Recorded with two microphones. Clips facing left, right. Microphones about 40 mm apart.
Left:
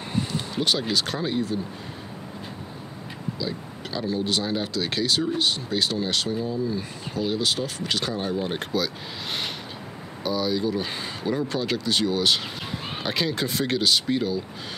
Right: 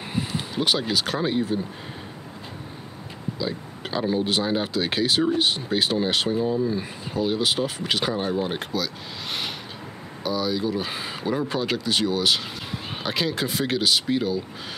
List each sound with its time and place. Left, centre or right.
0.1 s speech: centre
3.3 s speech: right
8.7 s speech: centre